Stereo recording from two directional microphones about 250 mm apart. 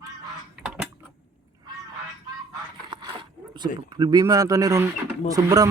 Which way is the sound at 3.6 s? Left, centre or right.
Centre.